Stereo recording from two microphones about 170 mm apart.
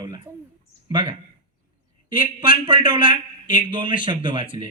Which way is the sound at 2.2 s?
30° right (ahead or behind).